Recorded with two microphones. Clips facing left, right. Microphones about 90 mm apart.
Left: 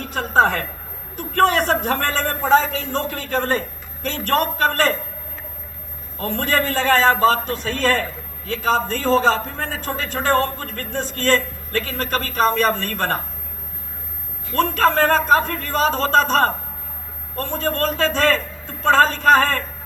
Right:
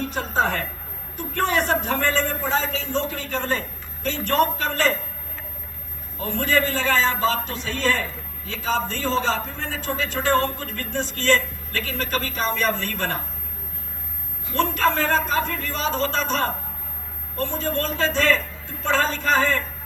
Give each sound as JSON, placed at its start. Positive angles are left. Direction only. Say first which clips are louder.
{"t": 0.1, "sound": "a sound", "louder": "left 9 dB", "side_deg": 60}
{"t": 1.2, "sound": "a man's voice", "louder": "left 6 dB", "side_deg": 60}
{"t": 2.5, "sound": "a man's voice", "louder": "left 7 dB", "side_deg": 60}
{"t": 6.1, "sound": "a woman's voice", "louder": "left 1 dB", "side_deg": 55}
{"t": 14.5, "sound": "a woman's voice", "louder": "left 4 dB", "side_deg": 45}